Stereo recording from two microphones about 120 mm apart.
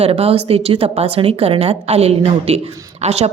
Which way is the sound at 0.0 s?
55° right (ahead or behind).